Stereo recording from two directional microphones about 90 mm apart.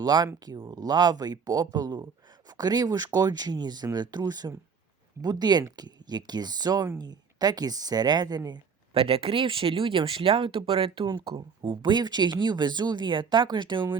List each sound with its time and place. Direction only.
0.0 s speech: 50° right (ahead or behind)
8.9 s speech: 90° right
11.0 s speech: 60° right (ahead or behind)